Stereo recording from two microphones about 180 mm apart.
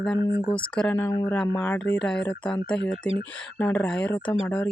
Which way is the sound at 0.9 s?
15° left (ahead or behind).